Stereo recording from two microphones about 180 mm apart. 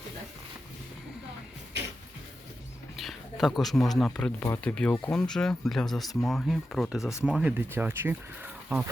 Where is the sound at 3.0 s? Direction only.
Centre (ahead or behind).